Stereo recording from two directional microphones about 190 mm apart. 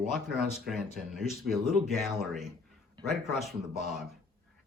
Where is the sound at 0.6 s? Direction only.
Centre (ahead or behind).